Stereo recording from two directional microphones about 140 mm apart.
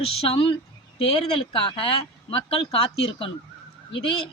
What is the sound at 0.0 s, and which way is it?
Speech, 45° left (ahead or behind).